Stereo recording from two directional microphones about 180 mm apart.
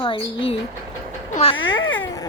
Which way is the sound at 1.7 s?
90° left.